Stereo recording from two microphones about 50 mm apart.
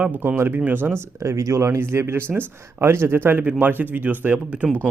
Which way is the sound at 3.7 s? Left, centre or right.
Right.